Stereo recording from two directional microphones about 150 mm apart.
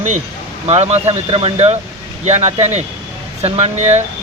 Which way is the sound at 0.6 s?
45° right (ahead or behind).